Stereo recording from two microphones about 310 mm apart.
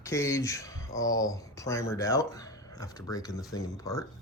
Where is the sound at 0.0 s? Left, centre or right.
Centre.